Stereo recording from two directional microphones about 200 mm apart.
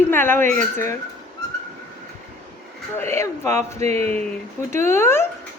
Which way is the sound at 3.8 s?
30° right (ahead or behind).